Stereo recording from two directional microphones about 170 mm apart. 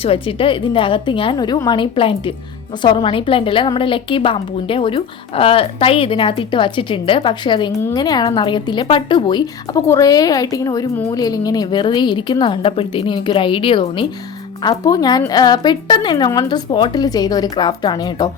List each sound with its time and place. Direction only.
0.0 s a woman's voice: 35° left (ahead or behind)